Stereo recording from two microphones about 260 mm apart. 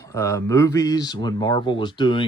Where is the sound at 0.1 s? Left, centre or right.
Centre.